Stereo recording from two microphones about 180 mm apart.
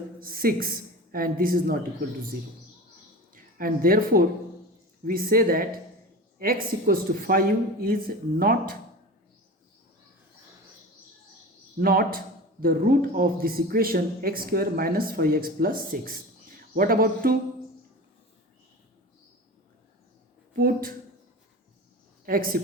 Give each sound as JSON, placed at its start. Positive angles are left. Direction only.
{"t": 0.2, "sound": "a man's voice", "side_deg": -55}
{"t": 3.3, "sound": "a man's voice", "side_deg": -55}
{"t": 11.8, "sound": "a man's voice", "side_deg": -55}
{"t": 20.6, "sound": "speech", "side_deg": -55}
{"t": 22.3, "sound": "a man's voice", "side_deg": -55}